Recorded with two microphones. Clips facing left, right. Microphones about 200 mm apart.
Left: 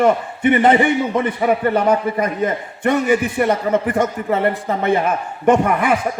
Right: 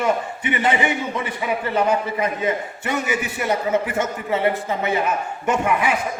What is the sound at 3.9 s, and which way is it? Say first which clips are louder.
A man's voice: left 5 dB; 60° left (ahead or behind).